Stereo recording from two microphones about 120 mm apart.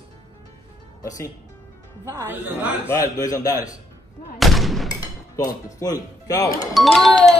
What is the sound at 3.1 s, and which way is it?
Speech, 30° left (ahead or behind).